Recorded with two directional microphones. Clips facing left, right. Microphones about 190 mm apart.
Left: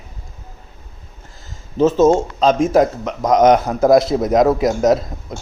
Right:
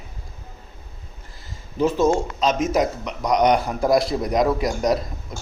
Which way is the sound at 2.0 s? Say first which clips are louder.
Left 6 dB; 45° left (ahead or behind).